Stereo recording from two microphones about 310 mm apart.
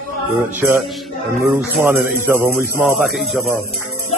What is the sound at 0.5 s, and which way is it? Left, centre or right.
Speech, centre.